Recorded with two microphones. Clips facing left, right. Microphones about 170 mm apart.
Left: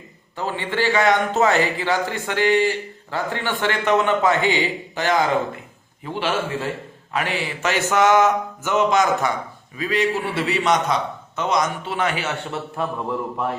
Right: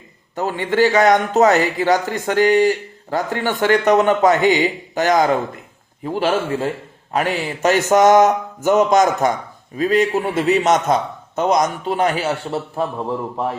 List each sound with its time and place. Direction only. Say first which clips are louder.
0.3 s a man's voice: right 7 dB; 45° right (ahead or behind)